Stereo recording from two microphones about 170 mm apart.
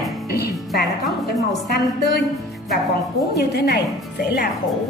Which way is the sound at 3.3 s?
75° left (ahead or behind).